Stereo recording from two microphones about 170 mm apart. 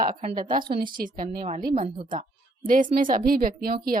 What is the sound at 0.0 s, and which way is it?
A woman's voice, 50° right (ahead or behind).